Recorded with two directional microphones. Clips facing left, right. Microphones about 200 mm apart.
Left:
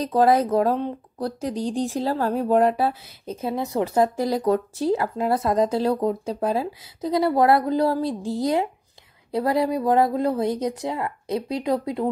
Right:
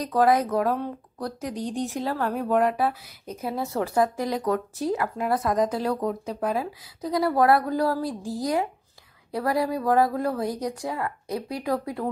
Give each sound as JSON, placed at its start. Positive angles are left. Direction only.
{"t": 0.0, "sound": "speech", "side_deg": 30}